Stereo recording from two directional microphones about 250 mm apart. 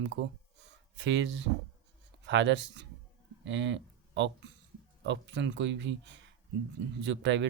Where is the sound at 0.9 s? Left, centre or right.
Right.